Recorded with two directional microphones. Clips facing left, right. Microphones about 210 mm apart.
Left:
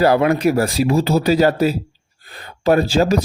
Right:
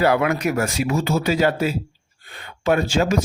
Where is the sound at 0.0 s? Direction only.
35° left (ahead or behind).